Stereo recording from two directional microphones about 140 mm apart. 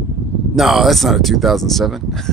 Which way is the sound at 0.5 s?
Centre (ahead or behind).